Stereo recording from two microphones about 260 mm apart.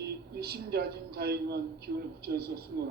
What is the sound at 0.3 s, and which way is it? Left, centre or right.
A man's voice, right.